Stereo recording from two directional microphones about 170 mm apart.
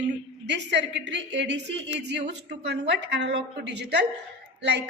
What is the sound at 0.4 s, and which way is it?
A woman's voice, 90° right.